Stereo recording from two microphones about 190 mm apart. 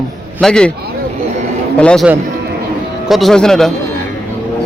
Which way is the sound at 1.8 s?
5° left (ahead or behind).